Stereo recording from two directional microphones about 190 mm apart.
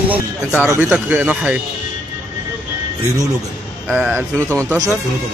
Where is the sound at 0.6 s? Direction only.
10° right (ahead or behind).